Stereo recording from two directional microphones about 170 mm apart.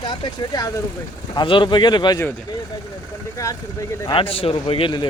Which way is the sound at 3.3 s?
20° left (ahead or behind).